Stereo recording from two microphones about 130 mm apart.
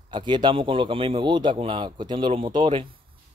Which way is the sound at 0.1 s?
35° right (ahead or behind).